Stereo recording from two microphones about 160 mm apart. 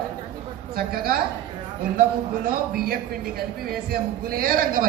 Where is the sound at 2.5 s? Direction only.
65° right (ahead or behind).